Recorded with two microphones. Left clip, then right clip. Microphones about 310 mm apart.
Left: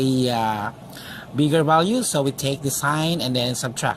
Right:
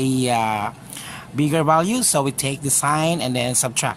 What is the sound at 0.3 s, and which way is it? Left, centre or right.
Speech, centre.